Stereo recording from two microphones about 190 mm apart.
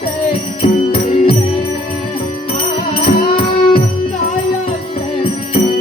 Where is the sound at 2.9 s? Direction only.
30° left (ahead or behind).